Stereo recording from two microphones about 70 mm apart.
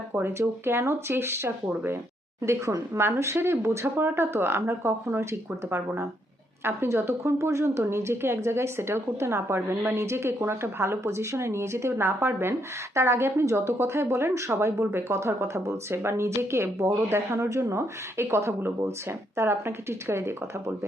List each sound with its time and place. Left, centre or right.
0.1 s speech: right